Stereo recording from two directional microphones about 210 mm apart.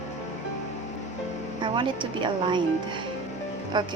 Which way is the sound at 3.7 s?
20° right (ahead or behind).